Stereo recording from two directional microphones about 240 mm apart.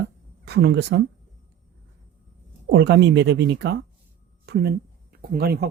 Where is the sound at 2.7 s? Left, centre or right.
Right.